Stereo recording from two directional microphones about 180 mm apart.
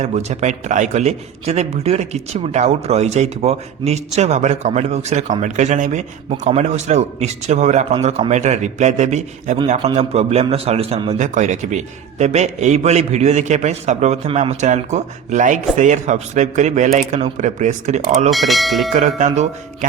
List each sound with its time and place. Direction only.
0.0 s speech: 40° right (ahead or behind)
18.3 s speech: centre (ahead or behind)
18.9 s speech: 40° right (ahead or behind)